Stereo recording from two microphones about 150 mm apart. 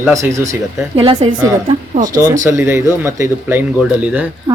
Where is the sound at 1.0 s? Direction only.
35° right (ahead or behind).